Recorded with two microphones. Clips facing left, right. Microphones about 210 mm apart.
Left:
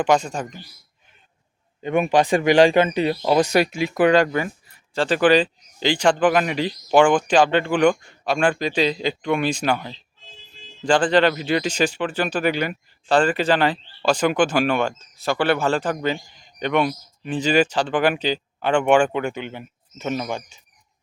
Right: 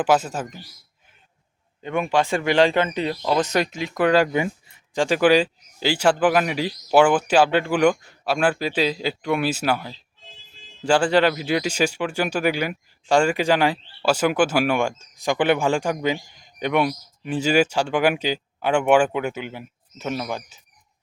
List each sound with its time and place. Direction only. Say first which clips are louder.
0.0 s speech: left 1 dB; 5° right (ahead or behind)
1.8 s speech: left 3 dB; 20° left (ahead or behind)
4.2 s speech: even; 20° right (ahead or behind)
5.0 s speech: even; 10° right (ahead or behind)